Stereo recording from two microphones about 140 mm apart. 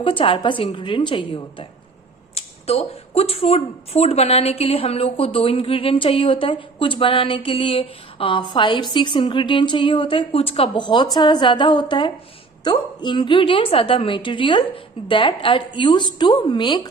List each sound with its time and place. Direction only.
0.0 s speech: 40° left (ahead or behind)
2.3 s speech: 45° left (ahead or behind); by 16.9 s 30° left (ahead or behind)